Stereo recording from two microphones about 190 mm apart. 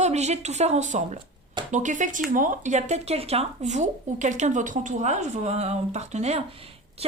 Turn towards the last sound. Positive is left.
turn(degrees=-30)  # may be behind; listen again after turning